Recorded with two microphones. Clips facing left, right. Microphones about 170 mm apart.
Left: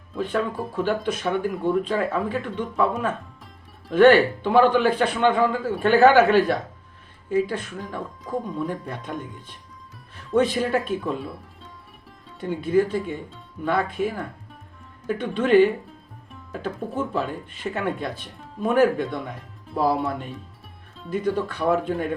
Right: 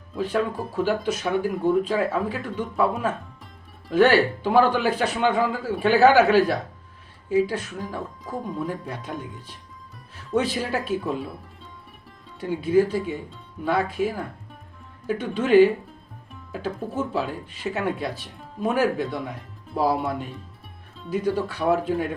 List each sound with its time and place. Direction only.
0.1 s speech: 5° right (ahead or behind)